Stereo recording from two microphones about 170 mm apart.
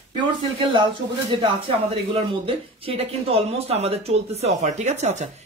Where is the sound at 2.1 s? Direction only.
35° right (ahead or behind).